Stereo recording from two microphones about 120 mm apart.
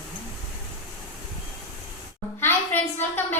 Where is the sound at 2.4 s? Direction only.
20° left (ahead or behind).